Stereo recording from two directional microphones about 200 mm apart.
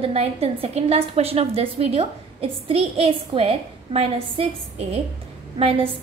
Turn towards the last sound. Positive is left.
turn(degrees=-30)  # may be behind; listen again after turning